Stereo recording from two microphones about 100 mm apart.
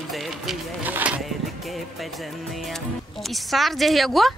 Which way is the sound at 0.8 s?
15° right (ahead or behind).